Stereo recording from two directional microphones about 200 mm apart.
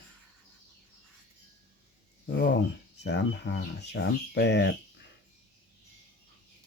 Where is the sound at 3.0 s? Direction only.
60° left (ahead or behind).